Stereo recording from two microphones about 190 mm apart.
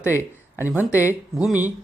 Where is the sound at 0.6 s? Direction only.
5° right (ahead or behind).